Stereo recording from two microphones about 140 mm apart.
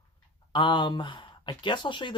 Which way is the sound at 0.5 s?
35° left (ahead or behind).